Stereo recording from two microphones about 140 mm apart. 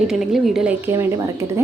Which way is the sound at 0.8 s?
15° right (ahead or behind).